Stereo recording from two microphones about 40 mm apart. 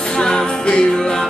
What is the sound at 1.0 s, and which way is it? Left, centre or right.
Music, centre.